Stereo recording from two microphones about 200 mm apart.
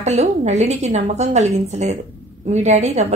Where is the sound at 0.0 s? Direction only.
35° right (ahead or behind).